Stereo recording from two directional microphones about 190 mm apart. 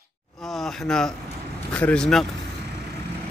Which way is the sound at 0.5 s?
Centre (ahead or behind).